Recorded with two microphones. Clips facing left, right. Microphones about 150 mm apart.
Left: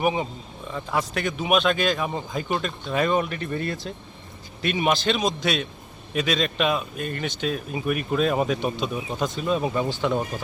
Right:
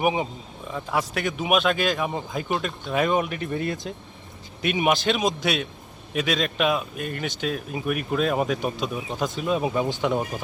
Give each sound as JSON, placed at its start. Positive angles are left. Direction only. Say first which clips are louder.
{"t": 0.0, "sound": "speech", "louder": "even", "side_deg": -15}
{"t": 0.7, "sound": "speech", "louder": "even", "side_deg": -5}
{"t": 9.9, "sound": "speech", "louder": "even", "side_deg": -20}